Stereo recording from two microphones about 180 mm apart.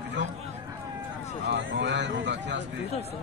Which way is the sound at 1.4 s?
80° right.